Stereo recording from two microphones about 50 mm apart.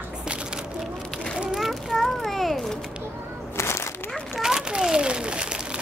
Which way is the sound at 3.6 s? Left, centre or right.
Left.